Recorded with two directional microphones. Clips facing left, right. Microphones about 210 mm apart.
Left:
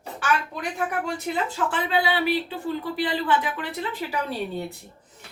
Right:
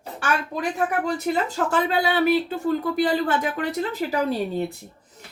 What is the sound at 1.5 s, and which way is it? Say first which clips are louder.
Speech: right 3 dB; 40° right (ahead or behind).